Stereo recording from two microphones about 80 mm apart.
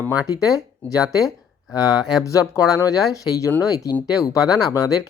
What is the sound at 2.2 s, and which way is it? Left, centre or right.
Speech, left.